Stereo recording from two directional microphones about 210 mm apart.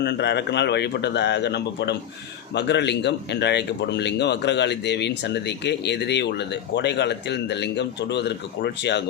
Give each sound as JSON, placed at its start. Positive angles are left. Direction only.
{"t": 0.0, "sound": "speech", "side_deg": 55}